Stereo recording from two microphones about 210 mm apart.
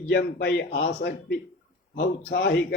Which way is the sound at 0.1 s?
55° left (ahead or behind).